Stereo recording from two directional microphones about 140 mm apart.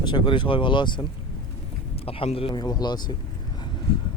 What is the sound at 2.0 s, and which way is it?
Speech, 45° left (ahead or behind).